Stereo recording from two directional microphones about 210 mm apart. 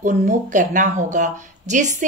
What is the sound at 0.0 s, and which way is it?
Speech, 35° right (ahead or behind).